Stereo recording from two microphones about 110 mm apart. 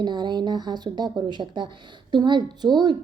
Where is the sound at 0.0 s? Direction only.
45° right (ahead or behind).